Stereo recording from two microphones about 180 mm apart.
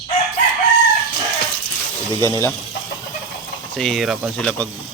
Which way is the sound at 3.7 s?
Centre (ahead or behind).